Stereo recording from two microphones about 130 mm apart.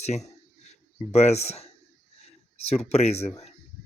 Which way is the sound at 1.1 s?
55° left (ahead or behind).